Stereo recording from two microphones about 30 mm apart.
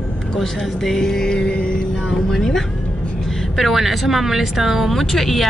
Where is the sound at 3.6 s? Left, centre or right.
Centre.